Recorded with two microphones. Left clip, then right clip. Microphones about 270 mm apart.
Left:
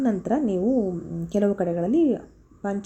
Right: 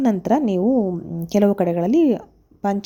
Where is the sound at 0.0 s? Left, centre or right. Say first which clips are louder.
Right 5 dB; right.